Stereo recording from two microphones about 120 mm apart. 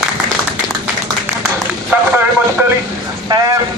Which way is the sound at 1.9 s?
15° right (ahead or behind).